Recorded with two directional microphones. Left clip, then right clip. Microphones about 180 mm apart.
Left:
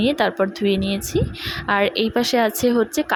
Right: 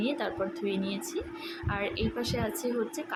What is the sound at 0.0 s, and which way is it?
A woman's voice, 50° left (ahead or behind).